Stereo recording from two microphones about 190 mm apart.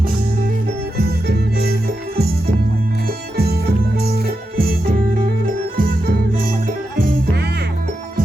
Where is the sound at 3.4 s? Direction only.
55° right (ahead or behind).